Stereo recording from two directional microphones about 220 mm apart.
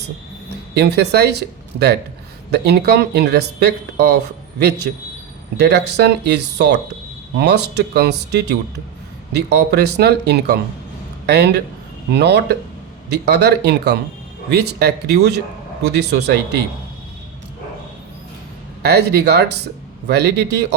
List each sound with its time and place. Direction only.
0.7 s speech: 50° right (ahead or behind)
18.8 s speech: 50° right (ahead or behind)